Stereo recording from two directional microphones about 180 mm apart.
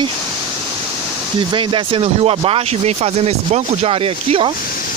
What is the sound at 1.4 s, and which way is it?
Speech, 30° right (ahead or behind).